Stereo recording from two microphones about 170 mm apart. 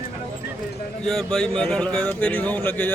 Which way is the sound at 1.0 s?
5° left (ahead or behind).